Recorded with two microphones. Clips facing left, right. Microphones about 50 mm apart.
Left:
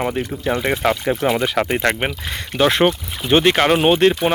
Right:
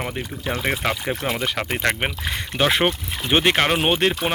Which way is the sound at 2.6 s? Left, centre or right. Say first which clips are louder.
Left 4 dB; centre.